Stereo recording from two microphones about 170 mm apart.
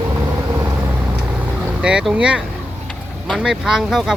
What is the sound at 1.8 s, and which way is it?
Speech, 5° right (ahead or behind).